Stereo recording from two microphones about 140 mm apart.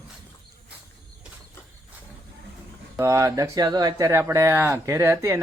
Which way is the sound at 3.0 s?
20° right (ahead or behind).